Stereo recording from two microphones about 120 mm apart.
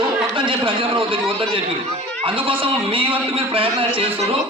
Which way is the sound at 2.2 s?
45° right (ahead or behind).